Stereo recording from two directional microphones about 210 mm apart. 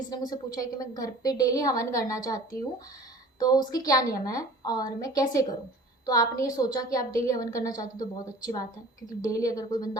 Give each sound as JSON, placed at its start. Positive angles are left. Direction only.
{"t": 0.1, "sound": "a woman's voice", "side_deg": 20}
{"t": 9.0, "sound": "a woman's voice", "side_deg": 15}